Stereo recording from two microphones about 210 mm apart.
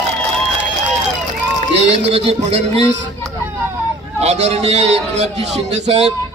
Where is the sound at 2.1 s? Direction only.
30° right (ahead or behind).